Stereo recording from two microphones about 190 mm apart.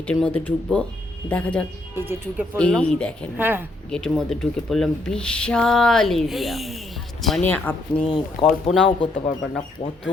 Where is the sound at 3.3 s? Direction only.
10° right (ahead or behind).